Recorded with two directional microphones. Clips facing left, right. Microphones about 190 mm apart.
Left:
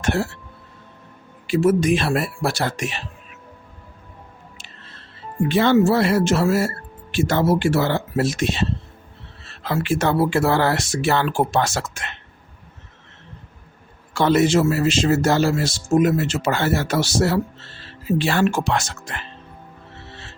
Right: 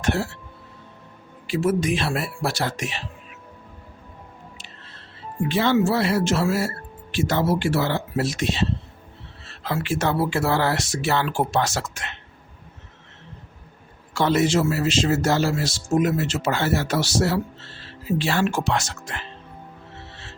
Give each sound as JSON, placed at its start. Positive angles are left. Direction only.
{"t": 0.0, "sound": "a man's voice", "side_deg": 50}
{"t": 1.5, "sound": "a man's voice", "side_deg": 50}
{"t": 5.5, "sound": "a man's voice", "side_deg": 55}
{"t": 9.6, "sound": "a man's voice", "side_deg": 55}
{"t": 14.1, "sound": "a man's voice", "side_deg": 55}